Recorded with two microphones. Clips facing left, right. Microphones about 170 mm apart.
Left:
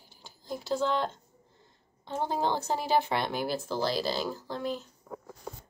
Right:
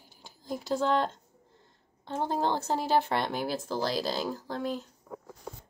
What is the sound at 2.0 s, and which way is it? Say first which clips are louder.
Speech: right 1 dB; 5° left (ahead or behind).